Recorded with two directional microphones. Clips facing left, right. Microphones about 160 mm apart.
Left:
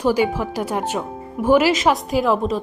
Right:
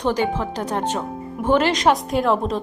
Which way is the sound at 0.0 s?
10° left (ahead or behind).